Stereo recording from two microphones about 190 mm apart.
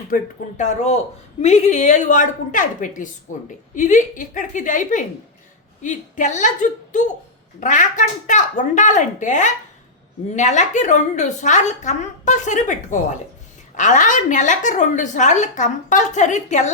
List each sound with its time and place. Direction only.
0.1 s a woman's voice: 40° left (ahead or behind)